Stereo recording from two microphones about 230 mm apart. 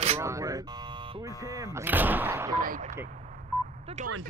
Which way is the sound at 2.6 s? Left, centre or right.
Right.